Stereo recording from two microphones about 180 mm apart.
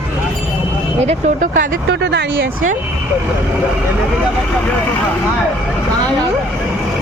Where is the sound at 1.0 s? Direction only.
45° right (ahead or behind).